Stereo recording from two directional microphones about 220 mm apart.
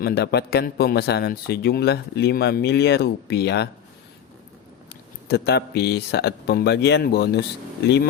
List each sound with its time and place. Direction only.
0.0 s a man's voice: 45° left (ahead or behind)
5.3 s a man's voice: 45° left (ahead or behind)